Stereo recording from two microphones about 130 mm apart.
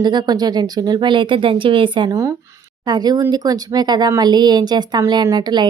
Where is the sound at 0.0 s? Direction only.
35° right (ahead or behind).